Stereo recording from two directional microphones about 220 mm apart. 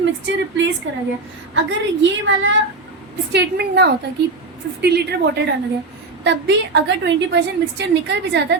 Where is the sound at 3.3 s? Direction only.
45° right (ahead or behind).